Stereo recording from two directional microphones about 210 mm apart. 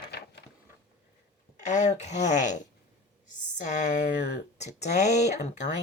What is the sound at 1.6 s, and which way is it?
A woman's voice, 35° left (ahead or behind).